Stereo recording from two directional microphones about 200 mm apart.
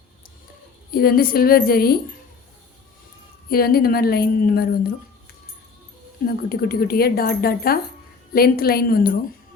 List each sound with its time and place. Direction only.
0.9 s speech: 50° left (ahead or behind)
3.5 s speech: 50° left (ahead or behind)
6.2 s speech: 50° left (ahead or behind)